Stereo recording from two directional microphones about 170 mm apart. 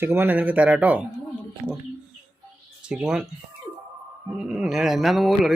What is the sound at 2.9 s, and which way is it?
Speech, 5° right (ahead or behind).